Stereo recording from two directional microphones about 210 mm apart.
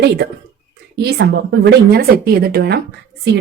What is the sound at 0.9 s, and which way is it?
A woman's voice, 50° right (ahead or behind).